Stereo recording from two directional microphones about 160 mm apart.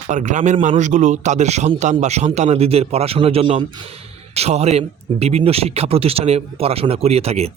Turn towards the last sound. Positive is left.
turn(degrees=-40)  # may be behind; listen again after turning